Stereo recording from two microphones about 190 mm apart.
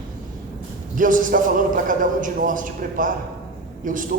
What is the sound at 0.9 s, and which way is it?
A man's voice, 45° right (ahead or behind).